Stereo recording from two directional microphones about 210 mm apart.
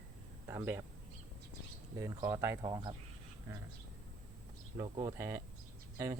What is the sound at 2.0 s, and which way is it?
Speech, 15° right (ahead or behind).